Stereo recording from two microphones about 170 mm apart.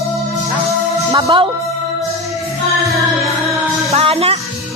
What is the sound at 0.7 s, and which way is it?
Music, 20° right (ahead or behind).